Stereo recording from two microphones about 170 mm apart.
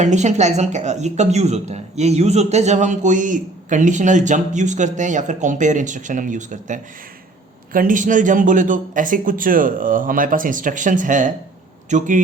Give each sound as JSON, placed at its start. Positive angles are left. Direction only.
{"t": 0.0, "sound": "a man's voice", "side_deg": -45}